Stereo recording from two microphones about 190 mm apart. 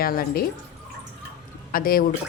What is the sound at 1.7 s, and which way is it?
Speech, 50° left (ahead or behind).